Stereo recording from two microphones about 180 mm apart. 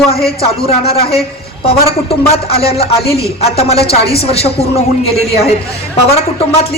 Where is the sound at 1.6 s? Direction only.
35° left (ahead or behind).